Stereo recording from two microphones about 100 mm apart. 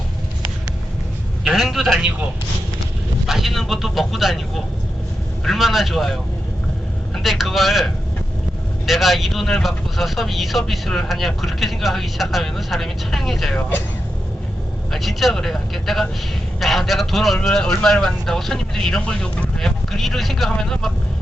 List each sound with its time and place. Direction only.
1.5 s speech: 5° right (ahead or behind)
3.2 s speech: centre (ahead or behind)
7.2 s speech: centre (ahead or behind)
13.6 s speech: 20° left (ahead or behind)
14.9 s speech: centre (ahead or behind)